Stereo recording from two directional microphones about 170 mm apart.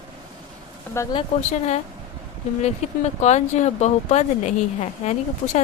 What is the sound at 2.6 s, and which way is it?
Speech, 40° left (ahead or behind).